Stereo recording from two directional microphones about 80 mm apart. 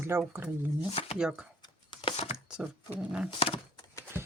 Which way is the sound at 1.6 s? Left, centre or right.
Left.